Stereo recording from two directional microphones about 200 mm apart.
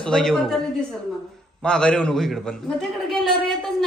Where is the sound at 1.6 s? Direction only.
5° left (ahead or behind).